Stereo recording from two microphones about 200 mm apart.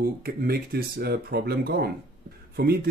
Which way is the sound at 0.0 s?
50° right (ahead or behind).